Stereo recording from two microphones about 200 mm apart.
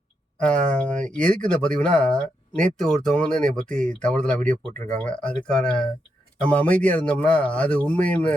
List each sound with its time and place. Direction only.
0.3 s a man's voice: 5° left (ahead or behind)